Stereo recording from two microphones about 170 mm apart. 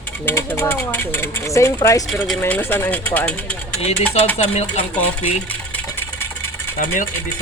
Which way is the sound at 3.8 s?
40° left (ahead or behind).